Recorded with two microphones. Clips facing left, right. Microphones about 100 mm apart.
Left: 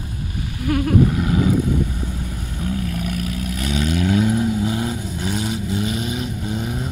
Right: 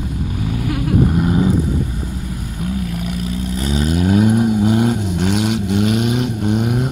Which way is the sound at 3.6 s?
35° right (ahead or behind).